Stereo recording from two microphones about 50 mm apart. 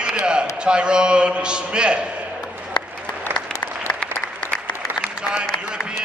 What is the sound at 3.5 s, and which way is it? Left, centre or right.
Applause, centre.